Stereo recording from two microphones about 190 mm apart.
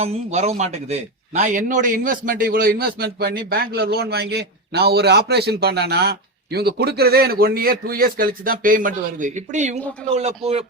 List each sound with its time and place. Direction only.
0.0 s speech: 35° right (ahead or behind)